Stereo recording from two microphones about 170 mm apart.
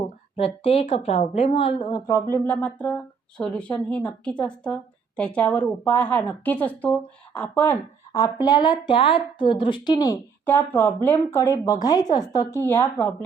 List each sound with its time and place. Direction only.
0.3 s a woman's voice: 35° left (ahead or behind)
2.3 s speech: 10° left (ahead or behind)